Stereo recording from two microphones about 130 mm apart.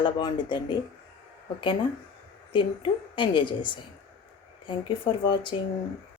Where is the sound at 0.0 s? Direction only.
40° left (ahead or behind).